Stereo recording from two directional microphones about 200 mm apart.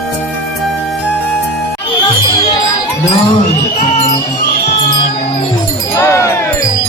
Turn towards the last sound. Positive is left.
turn(degrees=15)  # may be behind; listen again after turning